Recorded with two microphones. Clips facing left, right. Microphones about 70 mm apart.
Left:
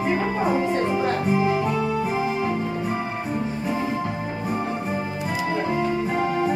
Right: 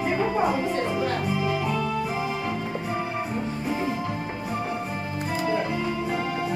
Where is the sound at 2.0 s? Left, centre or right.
Left.